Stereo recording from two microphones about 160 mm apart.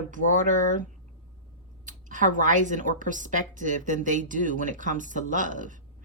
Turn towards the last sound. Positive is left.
turn(degrees=-55)  # may be behind; listen again after turning